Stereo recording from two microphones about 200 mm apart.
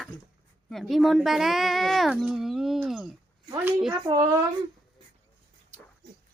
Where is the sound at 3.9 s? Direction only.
15° right (ahead or behind).